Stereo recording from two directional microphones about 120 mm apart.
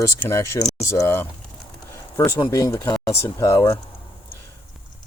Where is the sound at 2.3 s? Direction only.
30° left (ahead or behind).